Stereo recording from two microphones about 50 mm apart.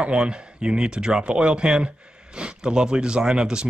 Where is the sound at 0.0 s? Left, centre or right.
Centre.